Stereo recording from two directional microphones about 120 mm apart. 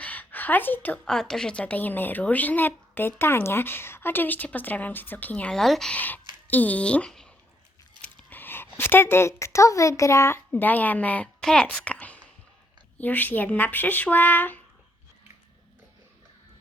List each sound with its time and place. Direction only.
0.0 s a woman's voice: 15° left (ahead or behind)
8.0 s biting: 10° left (ahead or behind)
8.8 s a woman's voice: 20° left (ahead or behind)